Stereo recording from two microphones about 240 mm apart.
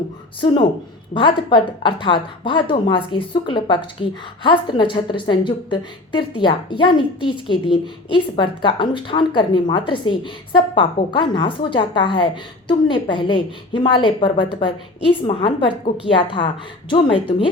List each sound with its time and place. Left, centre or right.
1.1 s a woman's voice: centre